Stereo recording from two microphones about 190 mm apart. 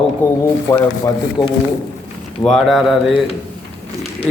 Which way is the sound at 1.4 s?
20° left (ahead or behind).